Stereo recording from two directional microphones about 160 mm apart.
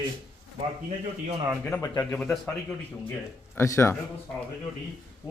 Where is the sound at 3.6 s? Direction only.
15° left (ahead or behind).